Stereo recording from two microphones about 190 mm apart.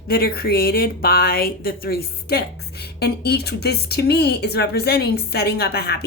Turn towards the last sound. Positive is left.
turn(degrees=60)  # may be behind; listen again after turning